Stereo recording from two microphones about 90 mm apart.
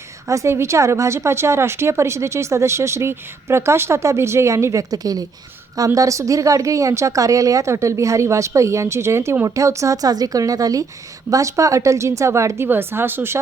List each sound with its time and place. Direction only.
0.3 s a woman's voice: 35° right (ahead or behind)